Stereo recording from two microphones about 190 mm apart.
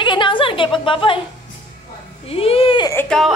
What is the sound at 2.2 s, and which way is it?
Speech, 30° left (ahead or behind).